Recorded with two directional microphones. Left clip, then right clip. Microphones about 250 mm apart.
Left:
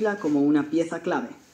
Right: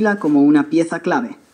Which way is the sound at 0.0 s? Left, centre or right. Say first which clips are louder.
Right 8 dB; right.